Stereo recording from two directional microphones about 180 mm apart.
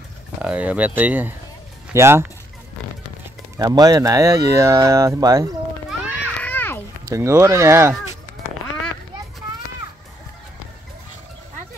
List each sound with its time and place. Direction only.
0.4 s speech: 5° right (ahead or behind)
3.5 s speech: 20° right (ahead or behind)
5.9 s music: 10° left (ahead or behind)
7.2 s speech: 15° right (ahead or behind)